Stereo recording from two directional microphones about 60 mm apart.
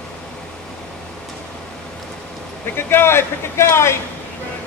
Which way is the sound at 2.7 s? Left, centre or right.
Left.